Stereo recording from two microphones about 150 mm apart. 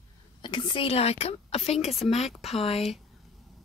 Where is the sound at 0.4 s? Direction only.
30° left (ahead or behind).